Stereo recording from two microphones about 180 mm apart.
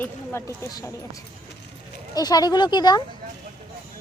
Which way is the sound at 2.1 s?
20° left (ahead or behind).